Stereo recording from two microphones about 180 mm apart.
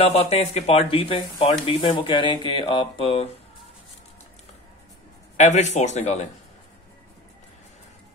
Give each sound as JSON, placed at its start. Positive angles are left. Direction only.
{"t": 0.0, "sound": "speech", "side_deg": 35}
{"t": 5.4, "sound": "speech", "side_deg": 40}